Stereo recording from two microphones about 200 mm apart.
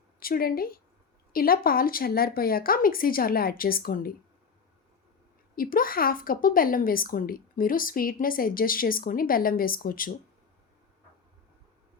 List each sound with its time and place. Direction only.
0.2 s a woman's voice: 45° left (ahead or behind)
5.5 s a woman's voice: 45° left (ahead or behind)